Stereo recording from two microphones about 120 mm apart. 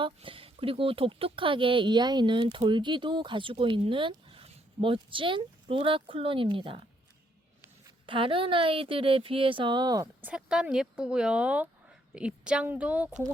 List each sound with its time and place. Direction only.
0.0 s speech: 50° right (ahead or behind)
7.9 s speech: 45° right (ahead or behind)
10.2 s speech: 10° right (ahead or behind)